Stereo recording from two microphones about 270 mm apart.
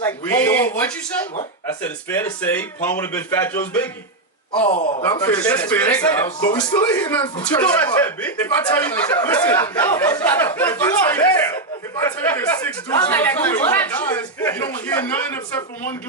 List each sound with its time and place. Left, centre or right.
0.0 s a sound: centre
1.8 s speech: centre
4.5 s speech: left; by 6.1 s centre
6.2 s speech: centre